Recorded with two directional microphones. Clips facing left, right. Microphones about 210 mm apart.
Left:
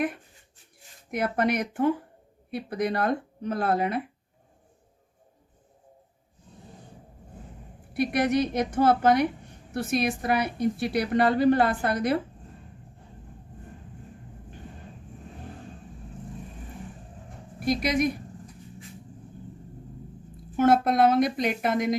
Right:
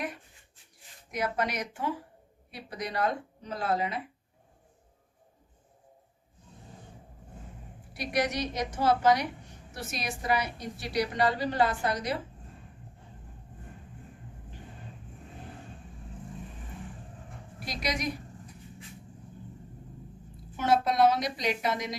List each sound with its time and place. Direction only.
1.1 s a woman's voice: 55° left (ahead or behind)
7.9 s a woman's voice: 55° left (ahead or behind)
17.7 s a woman's voice: 55° left (ahead or behind)
20.6 s a woman's voice: 55° left (ahead or behind)